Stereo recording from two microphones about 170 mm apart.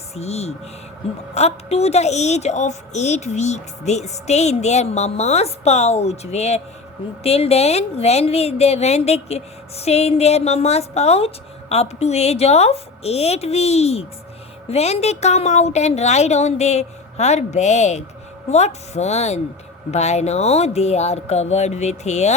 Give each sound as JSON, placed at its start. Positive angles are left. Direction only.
{"t": 0.1, "sound": "a woman's voice", "side_deg": 40}